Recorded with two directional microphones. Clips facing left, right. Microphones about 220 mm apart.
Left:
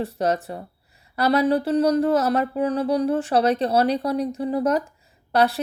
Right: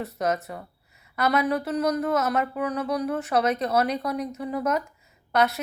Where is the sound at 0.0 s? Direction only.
30° left (ahead or behind).